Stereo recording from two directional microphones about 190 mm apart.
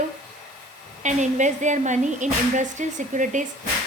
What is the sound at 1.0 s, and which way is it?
A woman's voice, 40° right (ahead or behind).